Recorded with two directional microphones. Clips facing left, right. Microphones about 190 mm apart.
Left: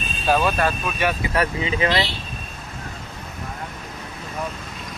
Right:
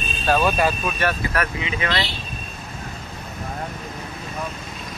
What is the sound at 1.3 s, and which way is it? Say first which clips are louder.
Speech: left 3 dB; 30° left (ahead or behind).